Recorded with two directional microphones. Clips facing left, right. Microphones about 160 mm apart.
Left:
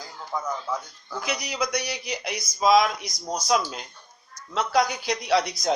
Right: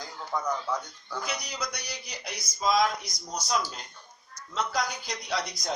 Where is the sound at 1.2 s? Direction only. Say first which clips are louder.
Left 7 dB; 85° left.